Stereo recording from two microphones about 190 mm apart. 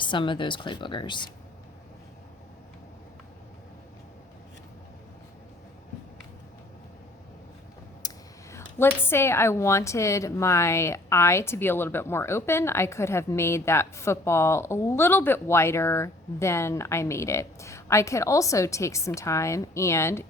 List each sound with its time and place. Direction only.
0.0 s speech: 25° left (ahead or behind)
8.0 s speech: 15° left (ahead or behind)